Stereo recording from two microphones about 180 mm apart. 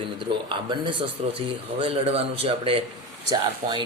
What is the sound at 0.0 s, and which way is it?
Speech, 25° right (ahead or behind).